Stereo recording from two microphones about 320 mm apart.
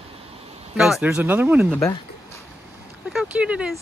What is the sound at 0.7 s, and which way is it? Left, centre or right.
Speech, centre.